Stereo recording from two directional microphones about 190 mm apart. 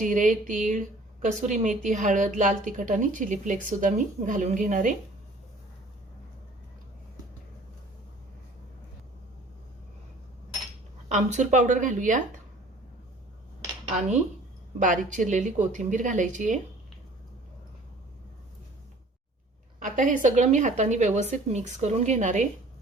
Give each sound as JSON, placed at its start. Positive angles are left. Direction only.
{"t": 0.0, "sound": "a woman's voice", "side_deg": -40}
{"t": 10.7, "sound": "cutlery", "side_deg": -40}
{"t": 14.8, "sound": "a woman's voice", "side_deg": -45}
{"t": 19.8, "sound": "a woman's voice", "side_deg": -40}